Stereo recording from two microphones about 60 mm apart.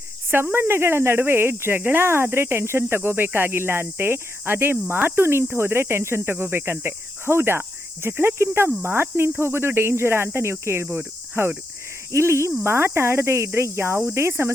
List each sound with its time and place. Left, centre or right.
0.3 s speech: right